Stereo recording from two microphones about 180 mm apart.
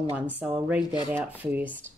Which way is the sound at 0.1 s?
10° right (ahead or behind).